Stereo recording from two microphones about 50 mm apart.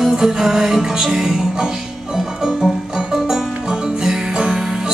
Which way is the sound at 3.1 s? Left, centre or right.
Centre.